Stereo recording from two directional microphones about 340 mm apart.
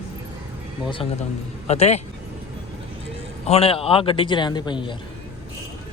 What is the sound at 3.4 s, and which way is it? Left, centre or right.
Speech, centre.